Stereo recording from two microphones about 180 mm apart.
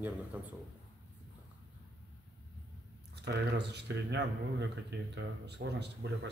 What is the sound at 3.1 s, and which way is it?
Speech, 65° right (ahead or behind).